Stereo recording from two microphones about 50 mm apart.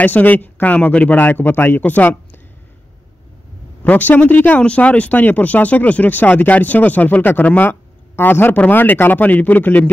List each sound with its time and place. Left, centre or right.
0.0 s a man's voice: left
1.8 s speech: left
3.8 s speech: left
4.6 s speech: left
8.2 s a man's voice: left